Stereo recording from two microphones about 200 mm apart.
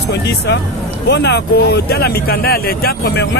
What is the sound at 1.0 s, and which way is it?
Speech, 60° left (ahead or behind).